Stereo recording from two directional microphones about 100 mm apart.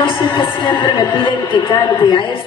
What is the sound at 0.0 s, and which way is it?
A woman's voice, 55° left (ahead or behind).